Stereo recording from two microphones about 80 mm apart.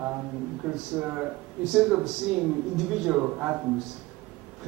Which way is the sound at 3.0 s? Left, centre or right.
Centre.